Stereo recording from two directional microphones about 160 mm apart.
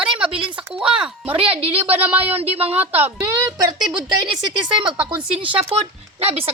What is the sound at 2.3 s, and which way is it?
Speech, 40° right (ahead or behind).